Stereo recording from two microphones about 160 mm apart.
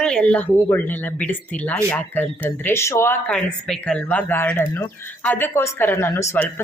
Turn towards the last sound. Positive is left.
turn(degrees=15)  # may be behind; listen again after turning